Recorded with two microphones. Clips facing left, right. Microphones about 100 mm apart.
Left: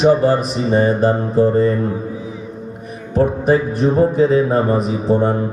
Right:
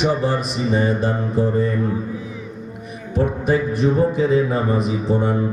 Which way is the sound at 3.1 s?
40° left (ahead or behind).